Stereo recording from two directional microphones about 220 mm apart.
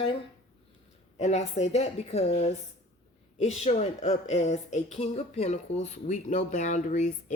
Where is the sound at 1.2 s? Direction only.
30° left (ahead or behind).